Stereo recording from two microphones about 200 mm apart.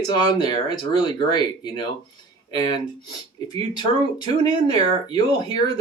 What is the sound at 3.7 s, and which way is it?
Speech, 20° left (ahead or behind).